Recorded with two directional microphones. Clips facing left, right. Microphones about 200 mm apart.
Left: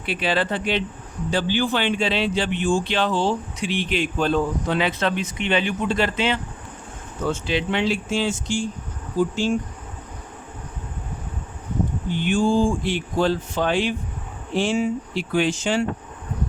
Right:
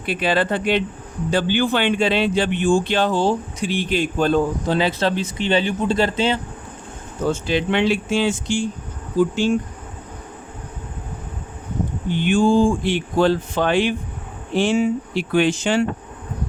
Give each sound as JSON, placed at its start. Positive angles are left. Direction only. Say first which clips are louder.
{"t": 0.0, "sound": "a man's voice", "louder": "right 3 dB", "side_deg": -45}
{"t": 7.3, "sound": "a man's voice", "louder": "right 3 dB", "side_deg": -45}
{"t": 7.7, "sound": "speech", "louder": "right 5 dB", "side_deg": -60}
{"t": 12.1, "sound": "speech", "louder": "right 4 dB", "side_deg": -65}